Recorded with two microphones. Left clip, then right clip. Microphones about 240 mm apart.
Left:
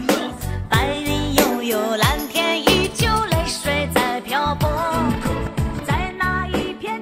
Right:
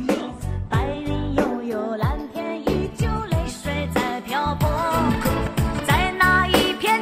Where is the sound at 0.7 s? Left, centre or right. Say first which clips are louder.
Left 6 dB; left; by 4.7 s centre.